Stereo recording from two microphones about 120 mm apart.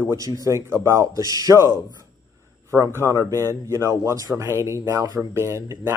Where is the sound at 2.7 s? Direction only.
20° right (ahead or behind).